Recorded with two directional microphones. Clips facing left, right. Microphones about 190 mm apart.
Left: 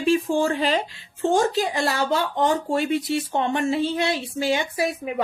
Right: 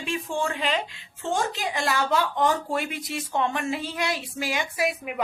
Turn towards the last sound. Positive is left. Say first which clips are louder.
# left 3 dB
turn(degrees=30)  # may be behind; listen again after turning